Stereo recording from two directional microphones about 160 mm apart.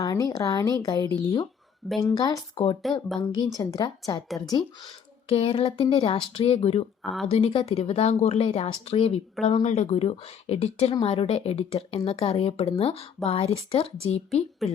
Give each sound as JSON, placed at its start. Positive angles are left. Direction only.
{"t": 0.0, "sound": "speech", "side_deg": 20}
{"t": 5.3, "sound": "speech", "side_deg": 35}
{"t": 7.0, "sound": "speech", "side_deg": 0}
{"t": 7.3, "sound": "speech", "side_deg": 35}
{"t": 14.6, "sound": "a woman's voice", "side_deg": 0}